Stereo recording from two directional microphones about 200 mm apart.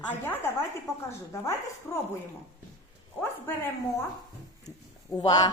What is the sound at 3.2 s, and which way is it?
A man's voice, 10° left (ahead or behind).